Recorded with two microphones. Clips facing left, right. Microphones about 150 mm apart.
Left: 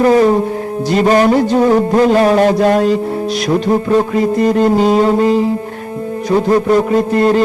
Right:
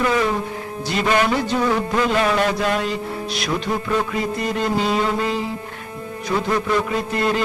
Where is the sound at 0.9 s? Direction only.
40° left (ahead or behind).